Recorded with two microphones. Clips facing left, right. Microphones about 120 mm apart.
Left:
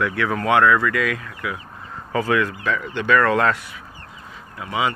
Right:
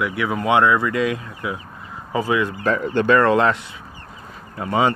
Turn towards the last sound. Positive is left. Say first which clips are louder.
# right 4 dB
turn(degrees=-40)  # may be behind; listen again after turning